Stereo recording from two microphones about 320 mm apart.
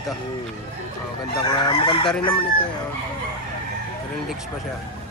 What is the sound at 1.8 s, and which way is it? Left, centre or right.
Fowl, centre.